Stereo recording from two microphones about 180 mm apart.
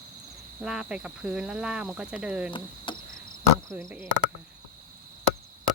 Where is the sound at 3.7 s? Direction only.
10° right (ahead or behind).